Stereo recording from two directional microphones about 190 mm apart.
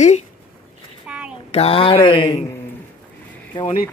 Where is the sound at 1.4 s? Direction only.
30° left (ahead or behind).